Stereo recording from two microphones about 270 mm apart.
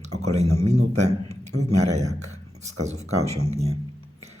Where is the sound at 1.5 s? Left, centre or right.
Right.